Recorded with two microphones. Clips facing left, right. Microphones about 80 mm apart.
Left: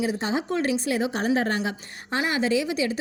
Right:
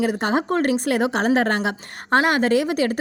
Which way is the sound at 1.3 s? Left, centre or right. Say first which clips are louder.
Right 5 dB; right.